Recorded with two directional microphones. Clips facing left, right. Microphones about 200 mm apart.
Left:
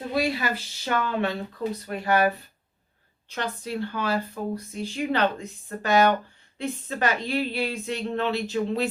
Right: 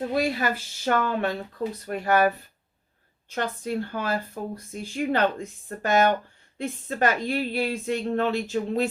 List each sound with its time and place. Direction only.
0.1 s a woman's voice: 45° right (ahead or behind)